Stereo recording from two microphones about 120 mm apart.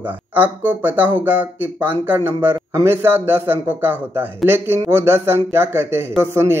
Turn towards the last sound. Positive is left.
turn(degrees=-20)  # may be behind; listen again after turning